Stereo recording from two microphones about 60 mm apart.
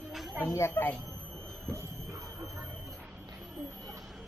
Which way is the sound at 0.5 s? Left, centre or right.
Left.